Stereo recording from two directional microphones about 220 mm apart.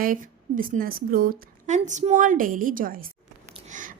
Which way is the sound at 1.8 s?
30° right (ahead or behind).